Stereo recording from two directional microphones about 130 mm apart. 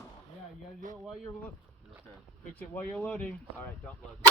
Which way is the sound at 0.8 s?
80° right.